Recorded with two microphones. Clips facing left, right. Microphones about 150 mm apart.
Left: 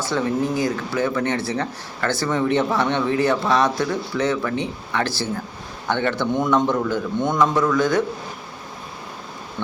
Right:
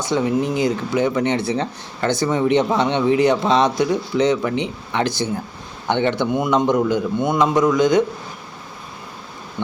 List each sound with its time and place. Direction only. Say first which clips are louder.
0.0 s a man's voice: right 3 dB; 15° right (ahead or behind)